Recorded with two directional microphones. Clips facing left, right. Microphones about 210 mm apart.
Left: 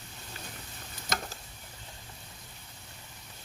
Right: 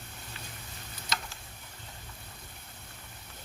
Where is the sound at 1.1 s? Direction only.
50° left (ahead or behind).